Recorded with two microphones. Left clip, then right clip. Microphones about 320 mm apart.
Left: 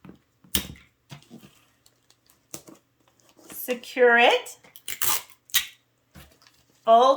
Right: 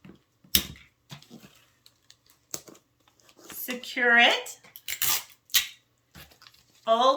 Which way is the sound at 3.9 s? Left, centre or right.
Centre.